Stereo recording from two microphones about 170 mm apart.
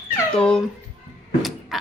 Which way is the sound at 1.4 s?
Centre (ahead or behind).